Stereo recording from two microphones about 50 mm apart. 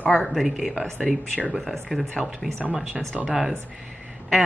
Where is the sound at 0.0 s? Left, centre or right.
Left.